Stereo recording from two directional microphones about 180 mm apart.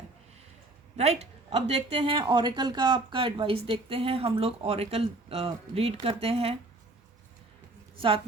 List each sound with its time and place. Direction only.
0.9 s speech: 35° right (ahead or behind)